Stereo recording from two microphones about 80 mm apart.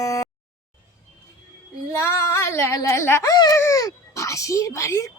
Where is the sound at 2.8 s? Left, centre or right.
Left.